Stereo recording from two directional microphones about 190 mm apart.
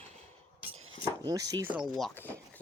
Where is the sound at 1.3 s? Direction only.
20° right (ahead or behind).